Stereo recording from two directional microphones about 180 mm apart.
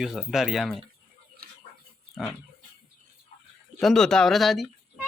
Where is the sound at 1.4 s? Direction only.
55° right (ahead or behind).